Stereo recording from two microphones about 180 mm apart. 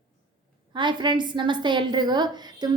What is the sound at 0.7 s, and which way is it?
A woman's voice, 25° right (ahead or behind).